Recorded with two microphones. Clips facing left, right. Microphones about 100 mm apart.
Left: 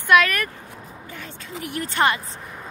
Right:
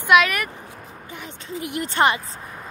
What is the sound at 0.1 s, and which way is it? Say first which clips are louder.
Speech: even; 15° right (ahead or behind).